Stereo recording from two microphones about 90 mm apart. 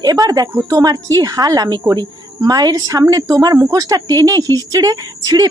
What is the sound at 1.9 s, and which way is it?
Speech, 45° right (ahead or behind).